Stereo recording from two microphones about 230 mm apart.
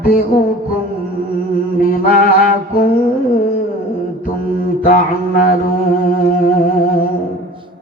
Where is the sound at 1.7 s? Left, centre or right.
Left.